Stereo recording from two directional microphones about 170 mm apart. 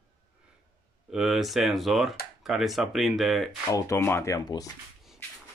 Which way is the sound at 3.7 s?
15° left (ahead or behind).